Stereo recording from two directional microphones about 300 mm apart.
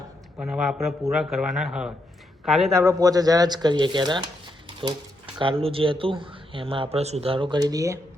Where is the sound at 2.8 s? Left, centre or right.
Centre.